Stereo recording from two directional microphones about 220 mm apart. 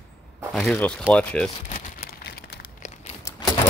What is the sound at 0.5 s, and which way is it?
Speech, centre (ahead or behind).